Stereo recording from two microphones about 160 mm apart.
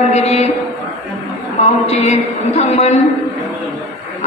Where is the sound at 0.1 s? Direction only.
40° left (ahead or behind).